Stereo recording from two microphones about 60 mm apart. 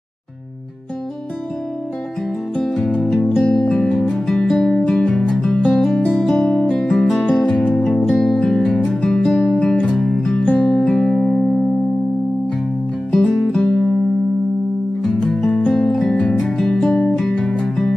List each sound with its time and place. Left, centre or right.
2.5 s music: centre
6.6 s music: left
6.9 s music: centre
10.4 s music: centre
13.1 s music: centre
15.2 s music: centre